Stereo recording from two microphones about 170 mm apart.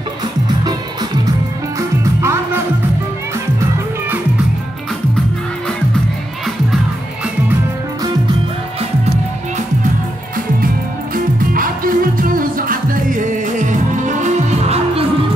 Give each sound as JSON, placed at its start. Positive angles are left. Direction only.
{"t": 0.7, "sound": "music", "side_deg": -25}
{"t": 11.5, "sound": "music", "side_deg": -55}